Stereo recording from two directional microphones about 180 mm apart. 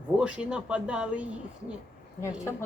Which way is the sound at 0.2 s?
5° right (ahead or behind).